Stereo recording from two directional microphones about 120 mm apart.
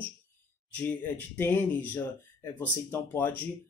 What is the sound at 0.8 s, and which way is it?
Speech, 15° left (ahead or behind).